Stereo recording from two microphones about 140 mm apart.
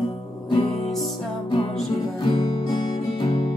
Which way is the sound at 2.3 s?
35° left (ahead or behind).